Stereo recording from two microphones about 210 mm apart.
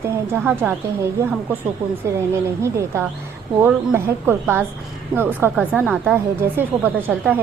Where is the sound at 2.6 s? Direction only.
15° right (ahead or behind).